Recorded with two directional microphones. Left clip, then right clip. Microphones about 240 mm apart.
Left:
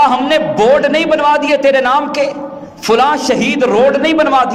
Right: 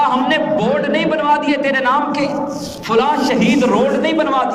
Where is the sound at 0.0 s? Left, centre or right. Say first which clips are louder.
Left 4 dB; left.